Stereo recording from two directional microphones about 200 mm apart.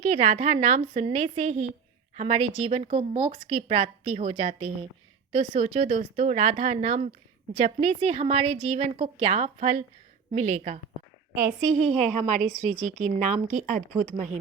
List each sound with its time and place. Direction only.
0.0 s speech: 35° right (ahead or behind)
11.9 s speech: 35° right (ahead or behind)